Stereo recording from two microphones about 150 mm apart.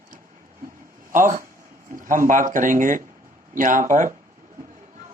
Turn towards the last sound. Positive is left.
turn(degrees=-55)  # may be behind; listen again after turning